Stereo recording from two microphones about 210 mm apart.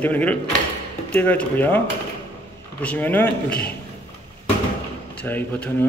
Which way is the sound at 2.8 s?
10° left (ahead or behind).